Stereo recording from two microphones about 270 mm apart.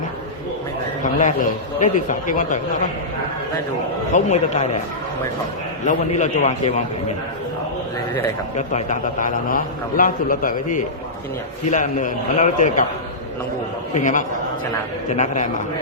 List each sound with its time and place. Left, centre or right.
1.8 s a man's voice: left
4.1 s a man's voice: left
5.9 s a man's voice: left
8.1 s a man's voice: left
13.9 s a man's voice: left